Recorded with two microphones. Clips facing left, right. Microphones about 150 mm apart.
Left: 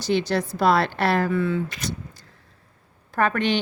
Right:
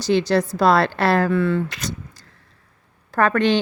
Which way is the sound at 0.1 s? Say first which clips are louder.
Right 4 dB; 90° right.